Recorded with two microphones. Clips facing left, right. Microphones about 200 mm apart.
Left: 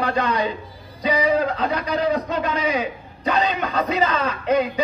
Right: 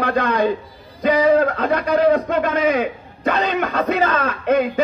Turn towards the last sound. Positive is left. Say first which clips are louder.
# right 2 dB
turn(degrees=-50)  # may be behind; listen again after turning